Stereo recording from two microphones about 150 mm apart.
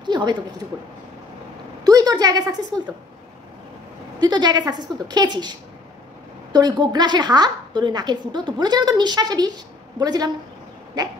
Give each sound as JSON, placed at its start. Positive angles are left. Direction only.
{"t": 0.0, "sound": "a woman's voice", "side_deg": -30}
{"t": 1.9, "sound": "a woman's voice", "side_deg": -25}
{"t": 2.7, "sound": "a woman's voice", "side_deg": 5}
{"t": 4.2, "sound": "a woman's voice", "side_deg": -30}